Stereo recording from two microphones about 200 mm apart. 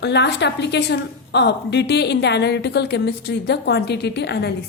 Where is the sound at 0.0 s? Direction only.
60° left (ahead or behind).